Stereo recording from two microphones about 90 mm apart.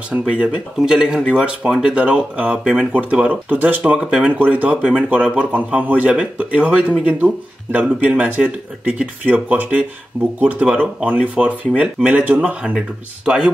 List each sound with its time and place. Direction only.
0.3 s speech: 10° right (ahead or behind)